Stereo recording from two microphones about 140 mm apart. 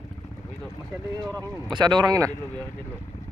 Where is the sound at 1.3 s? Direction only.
30° right (ahead or behind).